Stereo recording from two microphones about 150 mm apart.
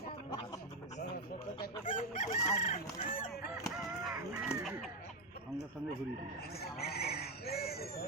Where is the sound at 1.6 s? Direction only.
60° left (ahead or behind).